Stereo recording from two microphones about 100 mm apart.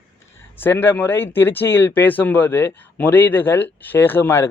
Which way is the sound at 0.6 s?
20° left (ahead or behind).